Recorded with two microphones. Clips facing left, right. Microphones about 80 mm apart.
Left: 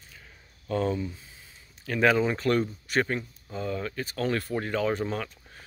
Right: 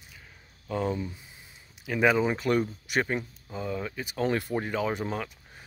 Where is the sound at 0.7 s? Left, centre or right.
Centre.